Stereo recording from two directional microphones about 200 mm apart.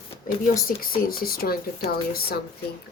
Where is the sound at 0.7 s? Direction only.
50° left (ahead or behind).